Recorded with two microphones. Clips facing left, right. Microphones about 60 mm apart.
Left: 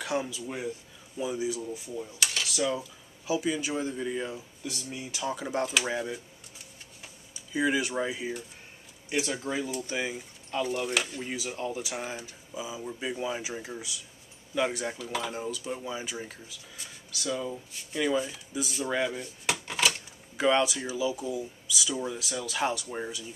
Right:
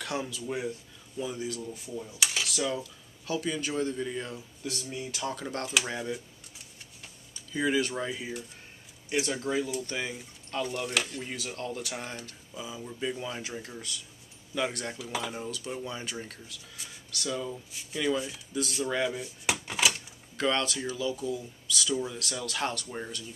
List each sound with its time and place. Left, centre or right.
0.0 s speech: centre
2.0 s speech: centre
2.4 s speech: centre
19.7 s typewriter: centre
20.3 s speech: centre